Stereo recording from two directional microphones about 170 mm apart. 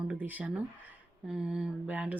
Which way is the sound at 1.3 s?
5° right (ahead or behind).